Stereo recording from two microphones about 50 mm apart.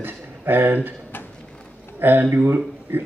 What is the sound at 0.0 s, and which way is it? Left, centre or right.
Speech, right.